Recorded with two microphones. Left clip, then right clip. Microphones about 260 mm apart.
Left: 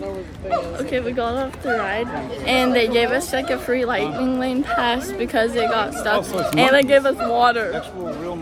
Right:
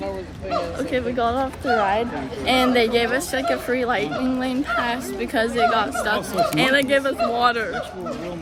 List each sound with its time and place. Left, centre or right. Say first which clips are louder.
0.8 s a woman's voice: even; centre
6.1 s speech: left 3 dB; centre